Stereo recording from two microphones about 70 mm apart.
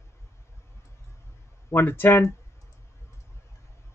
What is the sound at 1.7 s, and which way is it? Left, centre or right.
Speech, left.